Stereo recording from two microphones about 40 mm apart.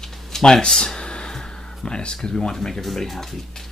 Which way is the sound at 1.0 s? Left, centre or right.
Left.